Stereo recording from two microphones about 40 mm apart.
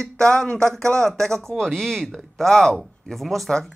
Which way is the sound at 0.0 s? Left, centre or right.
Centre.